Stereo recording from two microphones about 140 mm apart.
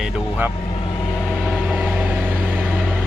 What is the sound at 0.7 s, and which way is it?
Vehicle, 30° left (ahead or behind).